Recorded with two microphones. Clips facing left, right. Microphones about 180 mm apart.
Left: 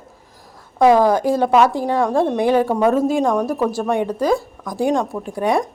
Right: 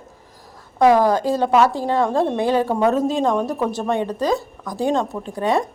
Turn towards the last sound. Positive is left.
turn(degrees=10)  # may be behind; listen again after turning